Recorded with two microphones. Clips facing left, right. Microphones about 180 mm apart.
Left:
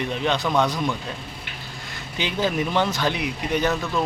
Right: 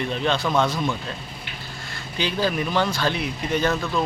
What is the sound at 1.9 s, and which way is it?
Speech, 20° left (ahead or behind).